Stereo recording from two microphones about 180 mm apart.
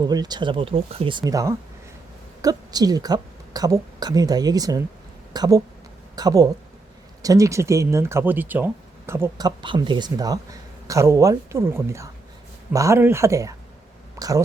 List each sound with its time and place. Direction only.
0.0 s a woman's voice: 20° right (ahead or behind)
9.6 s speech: 25° right (ahead or behind)